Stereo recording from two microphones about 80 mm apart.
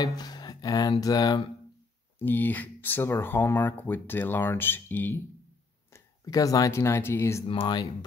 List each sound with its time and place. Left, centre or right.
0.0 s speech: left
2.1 s speech: left
5.9 s speech: left
7.4 s speech: left